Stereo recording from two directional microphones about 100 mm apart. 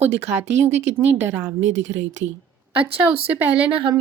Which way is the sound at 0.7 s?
90° right.